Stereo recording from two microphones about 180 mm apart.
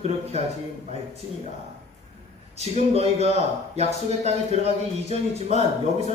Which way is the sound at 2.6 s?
35° right (ahead or behind).